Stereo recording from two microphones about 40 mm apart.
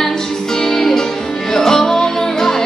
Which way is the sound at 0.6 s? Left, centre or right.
Centre.